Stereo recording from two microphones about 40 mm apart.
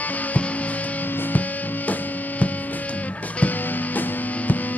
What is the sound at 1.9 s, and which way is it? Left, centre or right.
Music, left.